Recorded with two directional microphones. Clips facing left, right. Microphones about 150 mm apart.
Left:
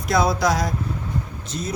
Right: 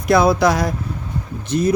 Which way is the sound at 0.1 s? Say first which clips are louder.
Right 6 dB; 60° right (ahead or behind).